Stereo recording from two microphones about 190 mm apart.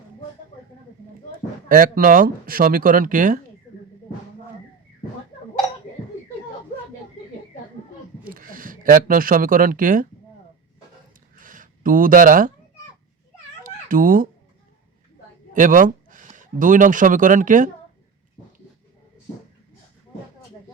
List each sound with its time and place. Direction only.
1.6 s speech: 50° right (ahead or behind)
8.2 s speech: 45° right (ahead or behind)
11.3 s a sound: 45° right (ahead or behind)
13.8 s speech: 45° right (ahead or behind)
15.5 s speech: 45° right (ahead or behind)